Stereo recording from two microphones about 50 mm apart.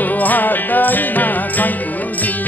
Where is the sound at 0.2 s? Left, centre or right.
Left.